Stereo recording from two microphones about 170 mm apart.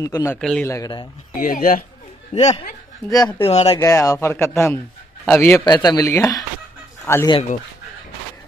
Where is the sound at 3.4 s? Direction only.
35° left (ahead or behind).